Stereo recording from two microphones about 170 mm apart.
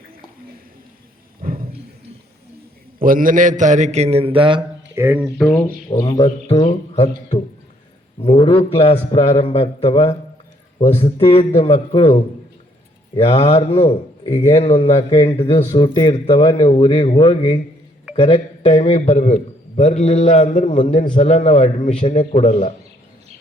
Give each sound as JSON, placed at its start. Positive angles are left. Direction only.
{"t": 1.5, "sound": "a sound", "side_deg": -60}
{"t": 3.0, "sound": "a man's voice", "side_deg": -55}
{"t": 4.9, "sound": "speech", "side_deg": -10}
{"t": 5.4, "sound": "speech", "side_deg": 10}
{"t": 5.9, "sound": "speech", "side_deg": 25}
{"t": 6.7, "sound": "a man's voice", "side_deg": 35}
{"t": 8.2, "sound": "a man's voice", "side_deg": 35}
{"t": 18.9, "sound": "a man's voice", "side_deg": 45}